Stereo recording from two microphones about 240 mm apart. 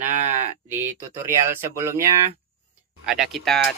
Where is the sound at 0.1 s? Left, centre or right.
Right.